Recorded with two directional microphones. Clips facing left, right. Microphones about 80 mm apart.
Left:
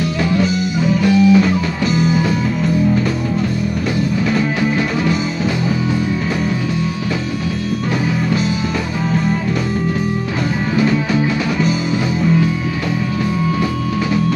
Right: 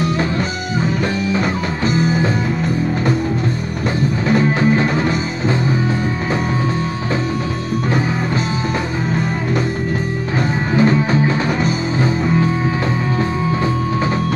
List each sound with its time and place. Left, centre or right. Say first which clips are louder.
0.3 s music: left 4 dB; right
4.3 s music: right 2 dB; right
10.8 s music: right 2 dB; right